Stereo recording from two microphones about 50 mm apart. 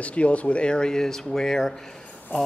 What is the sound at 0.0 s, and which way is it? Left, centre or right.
Speech, left.